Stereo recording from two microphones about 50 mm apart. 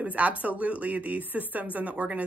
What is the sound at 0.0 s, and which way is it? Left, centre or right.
A woman's voice, right.